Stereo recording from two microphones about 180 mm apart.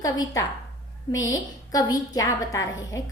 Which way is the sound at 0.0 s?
20° left (ahead or behind).